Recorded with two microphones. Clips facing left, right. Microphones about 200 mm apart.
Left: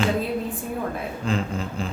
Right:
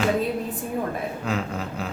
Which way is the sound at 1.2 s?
5° right (ahead or behind).